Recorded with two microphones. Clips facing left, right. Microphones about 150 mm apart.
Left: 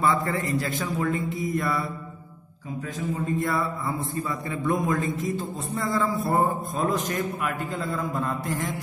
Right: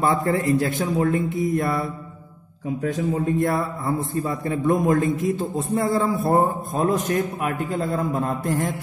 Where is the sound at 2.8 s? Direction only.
65° right (ahead or behind).